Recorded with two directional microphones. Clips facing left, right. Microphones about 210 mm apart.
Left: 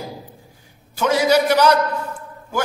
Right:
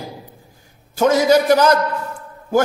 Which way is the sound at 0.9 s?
45° right (ahead or behind).